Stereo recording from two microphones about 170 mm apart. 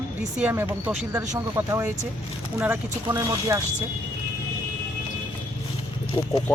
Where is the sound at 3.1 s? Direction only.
20° right (ahead or behind).